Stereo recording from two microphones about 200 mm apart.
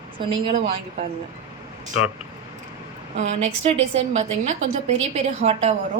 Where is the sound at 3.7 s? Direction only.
30° right (ahead or behind).